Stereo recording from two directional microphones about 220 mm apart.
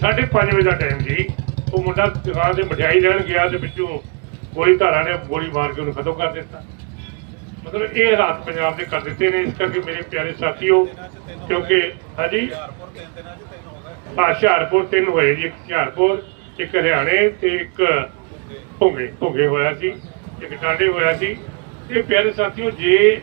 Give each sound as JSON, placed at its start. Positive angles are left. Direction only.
{"t": 0.0, "sound": "a man's voice", "side_deg": -55}
{"t": 7.8, "sound": "a man's voice", "side_deg": -55}
{"t": 14.2, "sound": "a man's voice", "side_deg": -50}